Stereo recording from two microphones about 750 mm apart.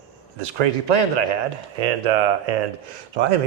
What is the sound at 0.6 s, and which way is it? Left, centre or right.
Speech, right.